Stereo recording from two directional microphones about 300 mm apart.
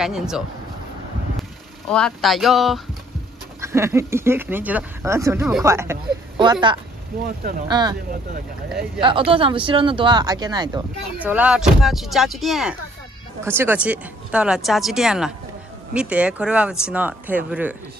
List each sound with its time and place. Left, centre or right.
0.0 s speech: centre
1.9 s speech: centre
7.2 s speech: right
7.6 s speech: centre
9.0 s speech: centre